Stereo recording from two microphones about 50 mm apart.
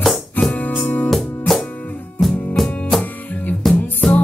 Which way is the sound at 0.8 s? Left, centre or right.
Left.